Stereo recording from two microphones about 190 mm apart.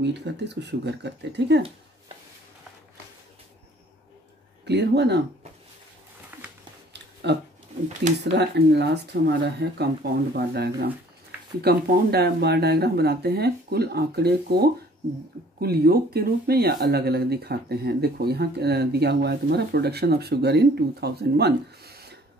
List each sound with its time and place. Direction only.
0.0 s speech: 65° right (ahead or behind)
4.6 s speech: 60° right (ahead or behind)
6.9 s a sound: 65° right (ahead or behind)
8.2 s speech: 60° right (ahead or behind)